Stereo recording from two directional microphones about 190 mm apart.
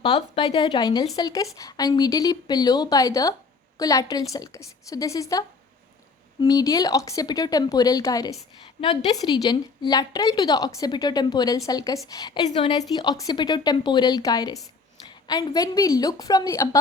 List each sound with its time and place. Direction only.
0.0 s a woman's voice: 25° left (ahead or behind)